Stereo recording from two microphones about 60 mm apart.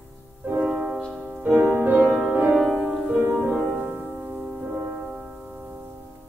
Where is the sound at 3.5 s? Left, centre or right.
Centre.